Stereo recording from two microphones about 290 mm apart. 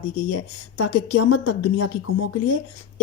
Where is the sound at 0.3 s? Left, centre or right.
Left.